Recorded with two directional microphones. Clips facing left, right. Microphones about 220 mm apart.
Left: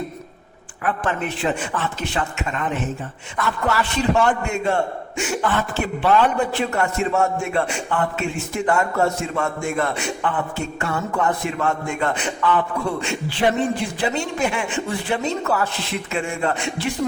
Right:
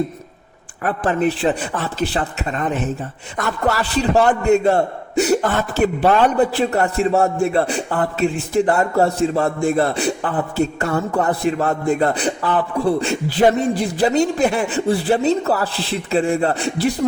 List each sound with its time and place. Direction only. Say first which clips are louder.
0.9 s a man's voice: right 6 dB; 35° right (ahead or behind)